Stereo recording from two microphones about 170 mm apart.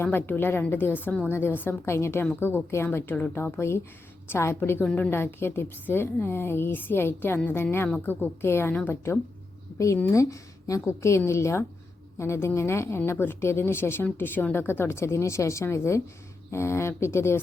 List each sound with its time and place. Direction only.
0.0 s speech: 10° left (ahead or behind)